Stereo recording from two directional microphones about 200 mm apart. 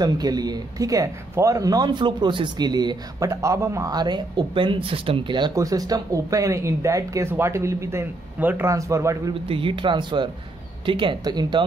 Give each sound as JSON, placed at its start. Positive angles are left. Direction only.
{"t": 0.0, "sound": "speech", "side_deg": -20}
{"t": 9.5, "sound": "speech", "side_deg": -25}